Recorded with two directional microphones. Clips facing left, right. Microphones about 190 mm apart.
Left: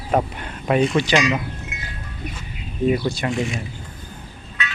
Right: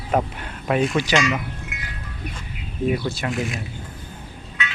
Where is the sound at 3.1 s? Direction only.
Centre (ahead or behind).